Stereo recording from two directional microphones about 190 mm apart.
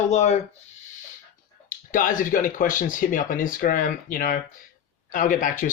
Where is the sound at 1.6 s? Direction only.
45° left (ahead or behind).